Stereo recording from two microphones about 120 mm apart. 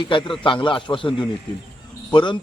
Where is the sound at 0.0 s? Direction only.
45° left (ahead or behind).